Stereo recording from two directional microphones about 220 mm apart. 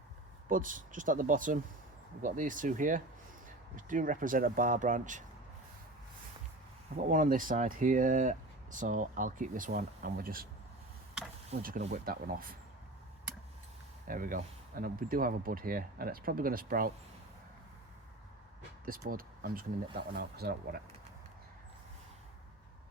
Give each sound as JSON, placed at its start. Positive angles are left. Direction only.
{"t": 0.4, "sound": "speech", "side_deg": -35}
{"t": 7.1, "sound": "speech", "side_deg": -40}
{"t": 11.6, "sound": "speech", "side_deg": -35}
{"t": 14.1, "sound": "speech", "side_deg": -40}
{"t": 18.9, "sound": "speech", "side_deg": -40}